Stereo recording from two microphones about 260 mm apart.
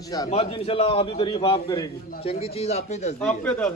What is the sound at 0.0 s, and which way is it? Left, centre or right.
A man's voice, centre.